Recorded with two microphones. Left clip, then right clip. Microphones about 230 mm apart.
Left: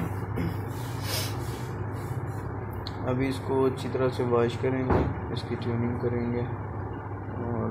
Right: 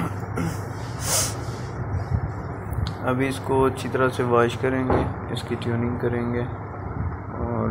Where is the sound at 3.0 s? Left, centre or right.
Centre.